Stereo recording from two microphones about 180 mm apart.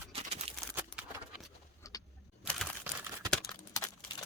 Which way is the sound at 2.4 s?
Centre (ahead or behind).